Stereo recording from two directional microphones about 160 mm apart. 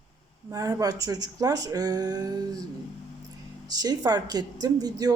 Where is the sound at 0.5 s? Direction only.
20° right (ahead or behind).